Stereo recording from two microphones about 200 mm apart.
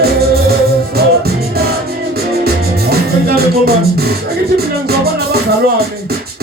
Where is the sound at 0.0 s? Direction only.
50° right (ahead or behind).